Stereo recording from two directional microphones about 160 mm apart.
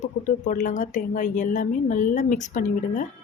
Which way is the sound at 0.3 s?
50° left (ahead or behind).